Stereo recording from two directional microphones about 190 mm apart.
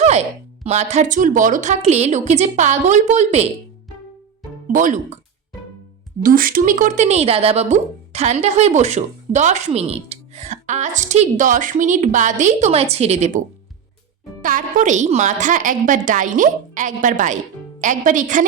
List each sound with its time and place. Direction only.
0.6 s speech: 35° right (ahead or behind)
4.7 s a woman's voice: 45° right (ahead or behind)
6.2 s speech: 50° right (ahead or behind)
14.4 s a woman's voice: 45° right (ahead or behind)